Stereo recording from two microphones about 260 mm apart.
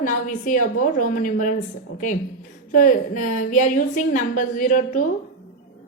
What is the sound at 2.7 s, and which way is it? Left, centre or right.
A woman's voice, left.